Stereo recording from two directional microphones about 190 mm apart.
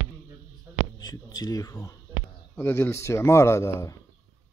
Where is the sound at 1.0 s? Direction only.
20° left (ahead or behind).